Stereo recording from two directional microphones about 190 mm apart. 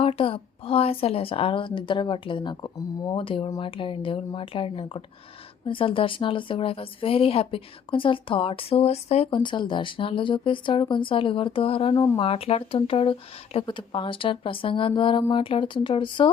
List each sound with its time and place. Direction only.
0.0 s speech: 30° left (ahead or behind)